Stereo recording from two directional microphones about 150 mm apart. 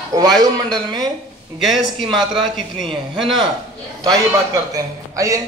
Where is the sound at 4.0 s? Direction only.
25° right (ahead or behind).